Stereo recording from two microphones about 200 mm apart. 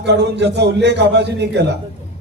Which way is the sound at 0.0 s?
60° right (ahead or behind).